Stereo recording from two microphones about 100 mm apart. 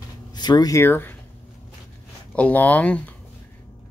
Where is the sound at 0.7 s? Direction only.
20° left (ahead or behind).